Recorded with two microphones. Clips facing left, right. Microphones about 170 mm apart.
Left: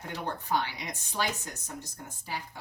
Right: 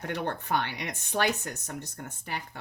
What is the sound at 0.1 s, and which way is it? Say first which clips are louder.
Speech: right 1 dB; 65° right (ahead or behind).